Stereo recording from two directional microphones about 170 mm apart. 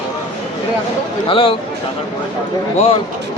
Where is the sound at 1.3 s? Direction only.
30° left (ahead or behind).